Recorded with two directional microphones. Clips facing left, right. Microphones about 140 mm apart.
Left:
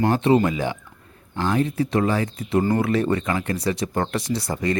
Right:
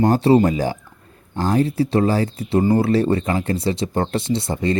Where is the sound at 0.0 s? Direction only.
35° right (ahead or behind).